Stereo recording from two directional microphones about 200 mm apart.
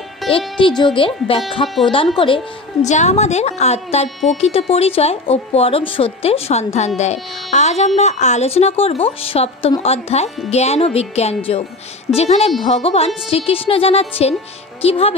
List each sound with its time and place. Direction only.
0.2 s music: centre (ahead or behind)
0.6 s speech: 25° left (ahead or behind)